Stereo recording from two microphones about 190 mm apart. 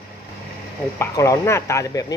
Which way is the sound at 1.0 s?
15° left (ahead or behind).